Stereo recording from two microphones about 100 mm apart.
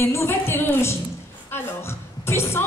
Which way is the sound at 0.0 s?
25° left (ahead or behind).